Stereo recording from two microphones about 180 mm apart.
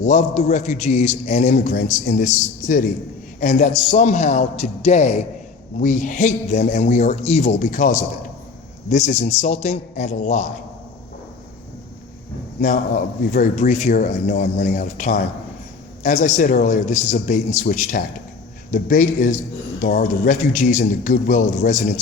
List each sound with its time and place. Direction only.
0.0 s a man's voice: 40° left (ahead or behind)
13.3 s a man's voice: 45° left (ahead or behind)